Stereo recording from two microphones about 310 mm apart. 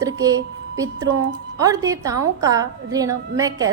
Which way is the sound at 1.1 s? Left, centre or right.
Right.